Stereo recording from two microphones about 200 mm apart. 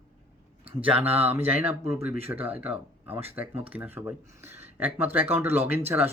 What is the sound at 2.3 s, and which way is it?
Speech, 10° right (ahead or behind).